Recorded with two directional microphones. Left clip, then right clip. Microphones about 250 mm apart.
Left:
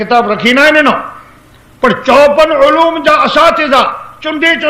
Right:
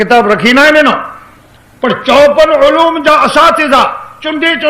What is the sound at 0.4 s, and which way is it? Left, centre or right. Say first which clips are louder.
Speech: left 1 dB; right.